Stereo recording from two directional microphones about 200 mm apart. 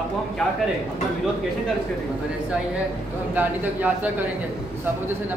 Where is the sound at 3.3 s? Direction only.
10° right (ahead or behind).